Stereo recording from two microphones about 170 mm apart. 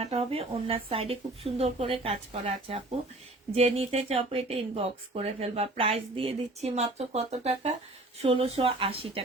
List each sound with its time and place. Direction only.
0.0 s speech: 35° right (ahead or behind)